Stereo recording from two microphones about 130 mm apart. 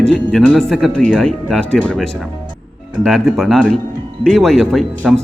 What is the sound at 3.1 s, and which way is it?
Speech, centre (ahead or behind).